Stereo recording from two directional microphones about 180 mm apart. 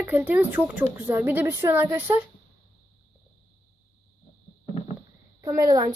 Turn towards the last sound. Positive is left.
turn(degrees=-20)  # may be behind; listen again after turning